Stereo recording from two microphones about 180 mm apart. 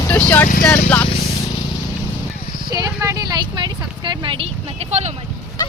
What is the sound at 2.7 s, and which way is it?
Vehicle, 20° right (ahead or behind).